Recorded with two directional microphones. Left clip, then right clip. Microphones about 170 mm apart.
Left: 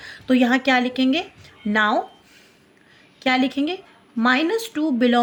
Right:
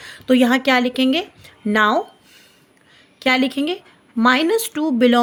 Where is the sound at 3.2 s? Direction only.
30° right (ahead or behind).